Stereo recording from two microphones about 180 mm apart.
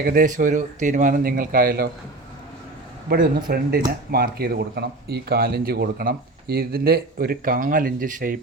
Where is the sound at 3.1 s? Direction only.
55° right (ahead or behind).